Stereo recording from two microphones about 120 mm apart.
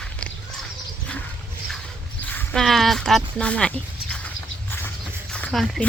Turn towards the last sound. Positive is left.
turn(degrees=0)  # may be behind; listen again after turning